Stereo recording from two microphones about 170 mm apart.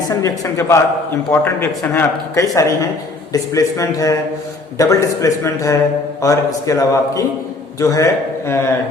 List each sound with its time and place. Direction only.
0.1 s a man's voice: 20° left (ahead or behind)